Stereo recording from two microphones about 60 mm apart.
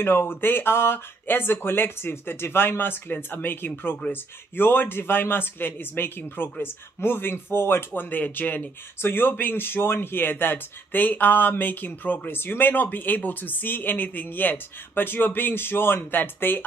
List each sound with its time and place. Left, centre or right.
0.0 s speech: left